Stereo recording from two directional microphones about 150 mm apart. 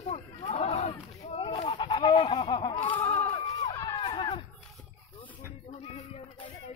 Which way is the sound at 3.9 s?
30° left (ahead or behind).